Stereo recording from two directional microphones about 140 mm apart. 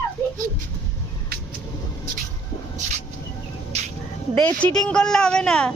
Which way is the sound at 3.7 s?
50° right (ahead or behind).